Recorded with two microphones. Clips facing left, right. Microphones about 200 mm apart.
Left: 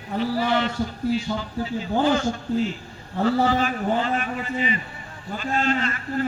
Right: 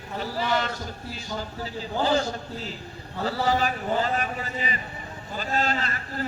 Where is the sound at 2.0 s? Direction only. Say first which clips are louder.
Even; 35° right (ahead or behind).